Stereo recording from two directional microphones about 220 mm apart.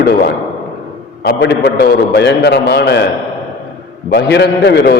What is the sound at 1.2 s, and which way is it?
A man's voice, 50° left (ahead or behind).